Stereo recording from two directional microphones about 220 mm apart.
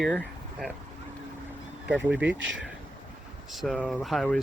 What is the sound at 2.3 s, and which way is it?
Speech, 55° right (ahead or behind).